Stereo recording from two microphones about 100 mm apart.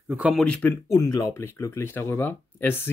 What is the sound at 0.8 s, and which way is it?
Speech, 35° left (ahead or behind).